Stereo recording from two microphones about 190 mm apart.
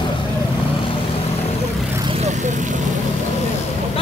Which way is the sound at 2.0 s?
35° right (ahead or behind).